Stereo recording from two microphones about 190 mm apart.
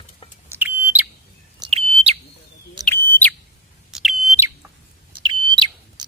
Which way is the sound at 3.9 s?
Centre (ahead or behind).